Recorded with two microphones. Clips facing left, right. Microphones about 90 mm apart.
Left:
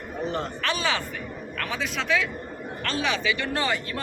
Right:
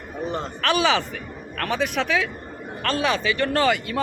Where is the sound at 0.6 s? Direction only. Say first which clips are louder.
Right 10 dB; 70° right (ahead or behind).